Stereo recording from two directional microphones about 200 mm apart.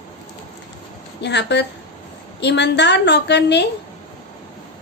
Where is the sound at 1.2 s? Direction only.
60° left (ahead or behind).